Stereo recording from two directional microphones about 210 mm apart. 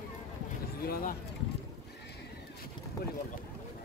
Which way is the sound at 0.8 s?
45° left (ahead or behind).